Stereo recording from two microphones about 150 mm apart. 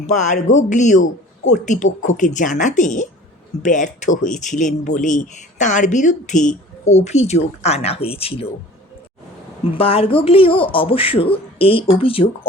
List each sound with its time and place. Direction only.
0.1 s speech: 55° left (ahead or behind)
9.7 s speech: 40° left (ahead or behind)